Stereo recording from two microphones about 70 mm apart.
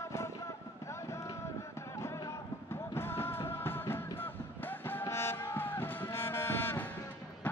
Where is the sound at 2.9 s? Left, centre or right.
Left.